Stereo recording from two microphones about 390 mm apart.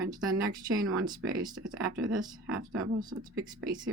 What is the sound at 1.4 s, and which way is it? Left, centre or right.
Speech, right.